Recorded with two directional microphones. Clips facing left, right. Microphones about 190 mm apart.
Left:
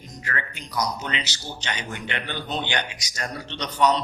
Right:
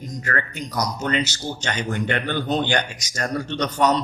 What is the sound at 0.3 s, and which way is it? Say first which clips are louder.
Speech: right 5 dB; 45° right (ahead or behind).